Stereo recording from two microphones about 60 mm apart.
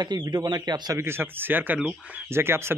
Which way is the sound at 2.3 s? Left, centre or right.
Right.